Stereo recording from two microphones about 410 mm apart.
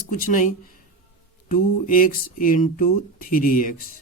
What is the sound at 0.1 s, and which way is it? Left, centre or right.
A man's voice, centre.